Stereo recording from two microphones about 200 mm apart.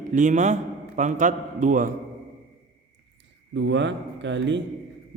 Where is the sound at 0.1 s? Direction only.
35° right (ahead or behind).